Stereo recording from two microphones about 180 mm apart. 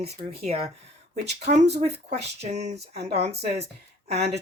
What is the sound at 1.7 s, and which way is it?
Speech, 40° right (ahead or behind).